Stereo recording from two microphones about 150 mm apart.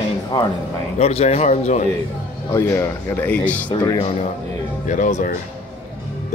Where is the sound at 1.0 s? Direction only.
45° left (ahead or behind).